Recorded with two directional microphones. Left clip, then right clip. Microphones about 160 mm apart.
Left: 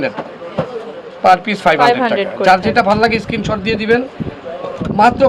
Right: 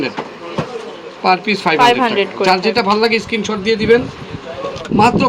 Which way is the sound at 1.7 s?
Centre (ahead or behind).